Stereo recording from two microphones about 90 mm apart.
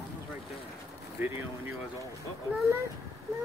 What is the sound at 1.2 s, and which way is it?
Speech, 25° right (ahead or behind).